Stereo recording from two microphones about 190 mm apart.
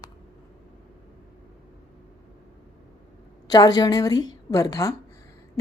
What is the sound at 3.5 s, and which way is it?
A woman's voice, 20° left (ahead or behind).